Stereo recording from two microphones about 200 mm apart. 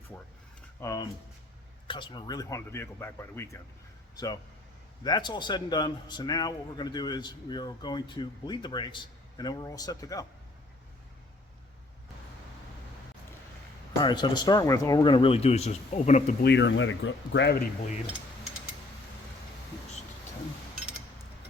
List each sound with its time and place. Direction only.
0.8 s a man's voice: 15° left (ahead or behind)
14.0 s a man's voice: 20° left (ahead or behind)
16.4 s speech: 60° left (ahead or behind)